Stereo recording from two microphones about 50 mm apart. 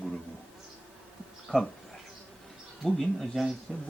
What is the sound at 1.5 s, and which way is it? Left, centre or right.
Speech, left.